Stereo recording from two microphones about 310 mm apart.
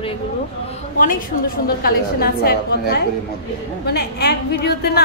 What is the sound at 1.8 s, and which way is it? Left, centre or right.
A woman's voice, left.